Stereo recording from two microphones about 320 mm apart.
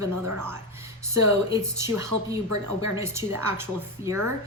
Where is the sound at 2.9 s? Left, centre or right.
Centre.